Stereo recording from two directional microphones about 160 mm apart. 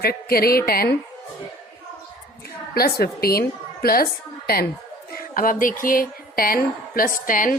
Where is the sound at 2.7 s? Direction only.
75° left (ahead or behind).